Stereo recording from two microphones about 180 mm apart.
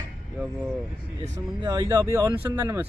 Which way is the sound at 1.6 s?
25° right (ahead or behind).